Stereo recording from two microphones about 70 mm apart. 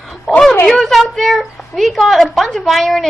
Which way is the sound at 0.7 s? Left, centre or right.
Centre.